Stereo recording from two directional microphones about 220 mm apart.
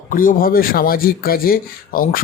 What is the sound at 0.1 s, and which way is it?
Speech, 40° left (ahead or behind).